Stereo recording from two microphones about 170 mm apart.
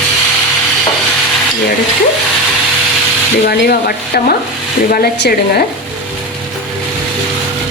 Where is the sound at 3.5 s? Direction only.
60° left (ahead or behind).